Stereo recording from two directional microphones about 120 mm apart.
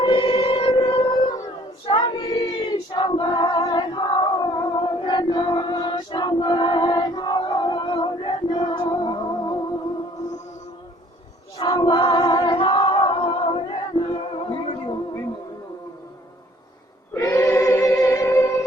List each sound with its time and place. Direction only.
0.0 s music: 40° left (ahead or behind)
1.8 s choir: 45° left (ahead or behind)
11.5 s female singing: 35° left (ahead or behind)
17.2 s choir: 25° left (ahead or behind)